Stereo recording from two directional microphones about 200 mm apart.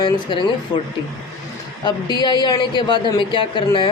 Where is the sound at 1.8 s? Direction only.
20° left (ahead or behind).